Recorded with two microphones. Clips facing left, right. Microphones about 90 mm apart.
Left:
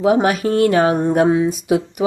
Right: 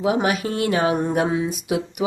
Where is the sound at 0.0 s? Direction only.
40° left (ahead or behind).